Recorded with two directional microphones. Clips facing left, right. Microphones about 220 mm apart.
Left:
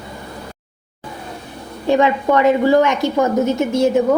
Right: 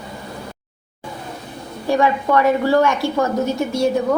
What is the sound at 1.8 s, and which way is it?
A woman's voice, 20° left (ahead or behind).